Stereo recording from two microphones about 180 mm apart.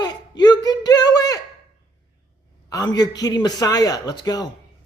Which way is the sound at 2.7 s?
20° left (ahead or behind).